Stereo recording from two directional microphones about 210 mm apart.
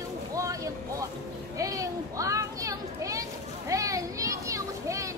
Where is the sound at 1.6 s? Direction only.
15° right (ahead or behind).